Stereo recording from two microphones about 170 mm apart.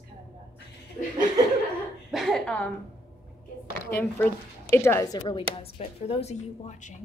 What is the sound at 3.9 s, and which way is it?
Speech, 10° left (ahead or behind).